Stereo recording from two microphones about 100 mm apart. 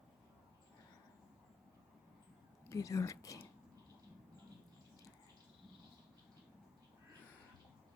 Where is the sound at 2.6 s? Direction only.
30° left (ahead or behind).